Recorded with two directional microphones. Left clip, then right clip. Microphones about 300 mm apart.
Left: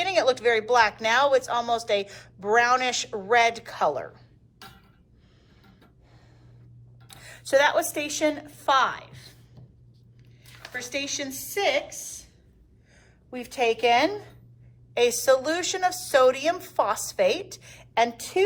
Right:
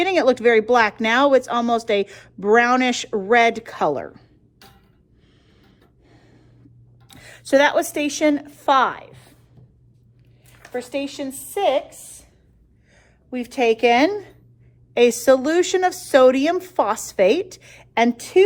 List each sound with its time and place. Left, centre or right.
0.0 s speech: right
6.1 s a sound: right
7.1 s a woman's voice: right
11.2 s a woman's voice: centre
12.9 s a woman's voice: right